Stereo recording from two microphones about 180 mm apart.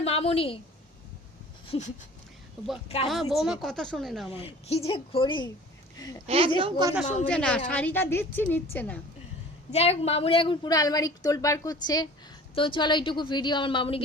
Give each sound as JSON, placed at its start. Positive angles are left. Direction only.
{"t": 0.0, "sound": "a woman's voice", "side_deg": 35}
{"t": 1.6, "sound": "a sound", "side_deg": 30}
{"t": 3.1, "sound": "speech", "side_deg": 0}
{"t": 4.3, "sound": "a woman's voice", "side_deg": 30}
{"t": 6.2, "sound": "a woman's voice", "side_deg": -35}
{"t": 6.6, "sound": "a woman's voice", "side_deg": -20}
{"t": 7.3, "sound": "a woman's voice", "side_deg": 5}
{"t": 9.7, "sound": "a woman's voice", "side_deg": 35}